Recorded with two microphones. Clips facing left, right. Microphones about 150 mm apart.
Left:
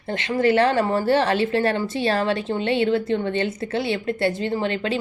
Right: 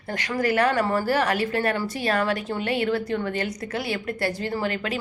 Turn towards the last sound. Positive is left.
turn(degrees=25)  # may be behind; listen again after turning